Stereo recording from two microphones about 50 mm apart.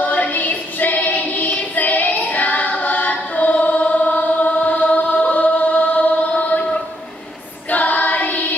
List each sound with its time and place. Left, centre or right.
0.0 s music: left
5.2 s chant: left
7.7 s child singing: left